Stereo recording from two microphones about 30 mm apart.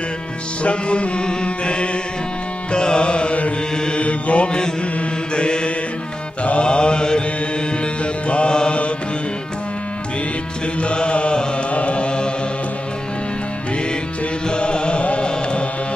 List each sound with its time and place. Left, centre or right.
0.6 s music: left
3.7 s mantra: left
4.0 s mantra: left
5.3 s mantra: left
7.8 s music: left
10.8 s music: left
14.5 s carnatic music: left